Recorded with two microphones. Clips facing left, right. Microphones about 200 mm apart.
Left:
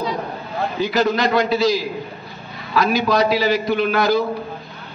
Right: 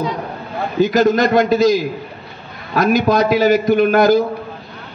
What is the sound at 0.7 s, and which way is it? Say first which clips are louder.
A man's voice: right 6 dB; 45° right (ahead or behind).